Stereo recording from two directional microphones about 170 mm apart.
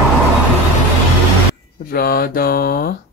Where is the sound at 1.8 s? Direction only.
65° left (ahead or behind).